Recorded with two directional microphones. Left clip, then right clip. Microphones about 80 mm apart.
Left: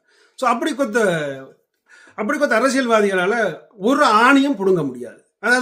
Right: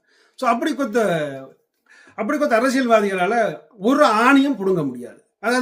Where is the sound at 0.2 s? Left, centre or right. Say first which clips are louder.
Left 1 dB; left.